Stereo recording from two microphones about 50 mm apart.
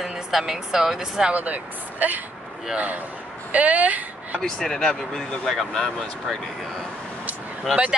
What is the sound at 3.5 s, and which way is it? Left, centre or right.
Speech, right.